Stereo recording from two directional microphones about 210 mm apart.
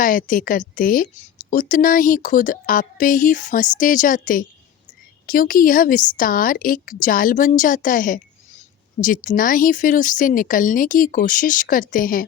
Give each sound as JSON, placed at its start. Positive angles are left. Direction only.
{"t": 0.0, "sound": "a woman's voice", "side_deg": 40}